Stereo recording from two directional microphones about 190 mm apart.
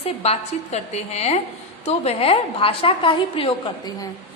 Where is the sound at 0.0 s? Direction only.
35° left (ahead or behind).